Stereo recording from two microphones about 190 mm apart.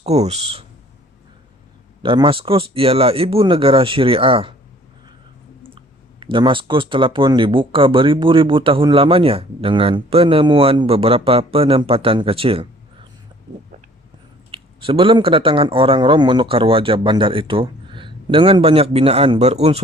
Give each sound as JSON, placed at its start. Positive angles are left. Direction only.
{"t": 0.0, "sound": "speech", "side_deg": -35}
{"t": 2.0, "sound": "speech", "side_deg": -25}
{"t": 5.7, "sound": "speech", "side_deg": -25}
{"t": 14.5, "sound": "speech", "side_deg": -30}